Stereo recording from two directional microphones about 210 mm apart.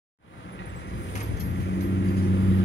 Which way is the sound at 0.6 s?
60° left (ahead or behind).